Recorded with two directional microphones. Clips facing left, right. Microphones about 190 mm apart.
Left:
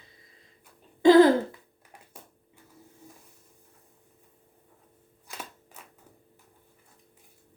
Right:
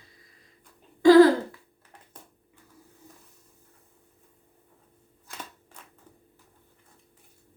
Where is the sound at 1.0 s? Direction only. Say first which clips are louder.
Right 2 dB; 20° left (ahead or behind).